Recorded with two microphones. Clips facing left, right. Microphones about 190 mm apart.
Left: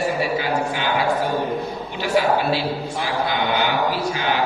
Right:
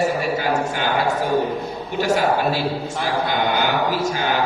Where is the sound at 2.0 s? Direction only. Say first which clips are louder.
Even; 45° right (ahead or behind).